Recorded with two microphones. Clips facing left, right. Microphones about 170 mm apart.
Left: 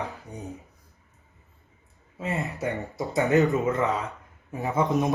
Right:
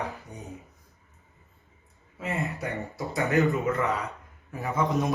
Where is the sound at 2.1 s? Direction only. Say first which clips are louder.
Left 1 dB; 20° left (ahead or behind).